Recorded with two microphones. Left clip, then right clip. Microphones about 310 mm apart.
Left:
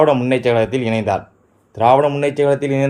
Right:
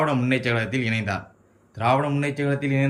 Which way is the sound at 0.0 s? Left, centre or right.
Centre.